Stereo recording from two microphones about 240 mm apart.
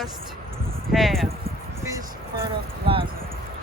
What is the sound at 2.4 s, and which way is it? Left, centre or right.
Speech, right.